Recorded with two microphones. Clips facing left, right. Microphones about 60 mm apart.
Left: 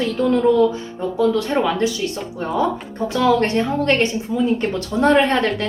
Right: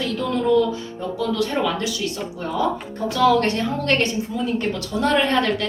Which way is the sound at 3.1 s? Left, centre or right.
Left.